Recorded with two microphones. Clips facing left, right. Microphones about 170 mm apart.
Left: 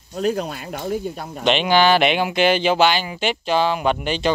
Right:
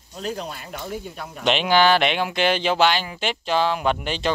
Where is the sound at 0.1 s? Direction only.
50° left (ahead or behind).